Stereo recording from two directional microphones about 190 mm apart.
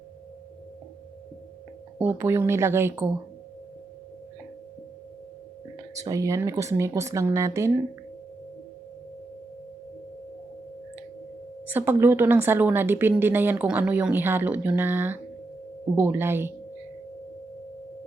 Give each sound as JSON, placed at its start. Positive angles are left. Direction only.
{"t": 2.0, "sound": "speech", "side_deg": -10}
{"t": 6.0, "sound": "speech", "side_deg": -15}
{"t": 11.7, "sound": "speech", "side_deg": -10}